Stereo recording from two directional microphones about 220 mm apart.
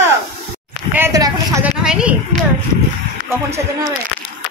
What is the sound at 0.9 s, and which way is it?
Speech, 15° right (ahead or behind).